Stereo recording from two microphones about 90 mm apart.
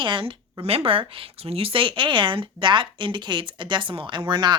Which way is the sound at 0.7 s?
90° right.